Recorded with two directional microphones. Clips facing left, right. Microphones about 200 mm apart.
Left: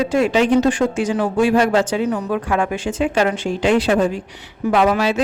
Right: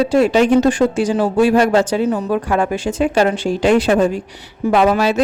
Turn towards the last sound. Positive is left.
turn(degrees=-40)  # may be behind; listen again after turning